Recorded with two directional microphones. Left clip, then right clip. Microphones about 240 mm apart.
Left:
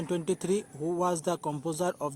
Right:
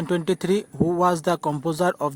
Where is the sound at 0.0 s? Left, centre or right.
Right.